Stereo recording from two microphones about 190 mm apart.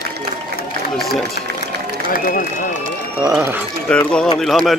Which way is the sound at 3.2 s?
15° right (ahead or behind).